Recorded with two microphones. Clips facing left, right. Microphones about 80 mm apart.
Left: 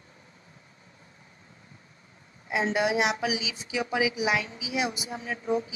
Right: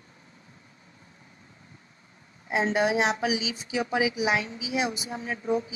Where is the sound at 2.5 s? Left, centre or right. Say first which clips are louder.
Right 1 dB; right.